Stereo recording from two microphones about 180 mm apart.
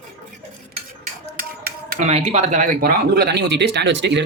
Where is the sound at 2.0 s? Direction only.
35° right (ahead or behind).